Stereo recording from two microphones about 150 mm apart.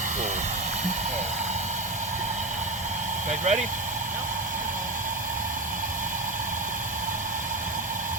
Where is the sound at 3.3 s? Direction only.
55° right (ahead or behind).